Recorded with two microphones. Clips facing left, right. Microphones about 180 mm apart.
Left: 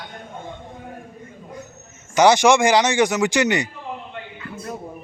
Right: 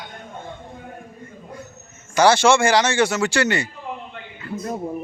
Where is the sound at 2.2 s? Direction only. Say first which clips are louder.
Left 1 dB; 15° left (ahead or behind).